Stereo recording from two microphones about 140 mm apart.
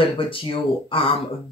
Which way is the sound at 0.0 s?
40° left (ahead or behind).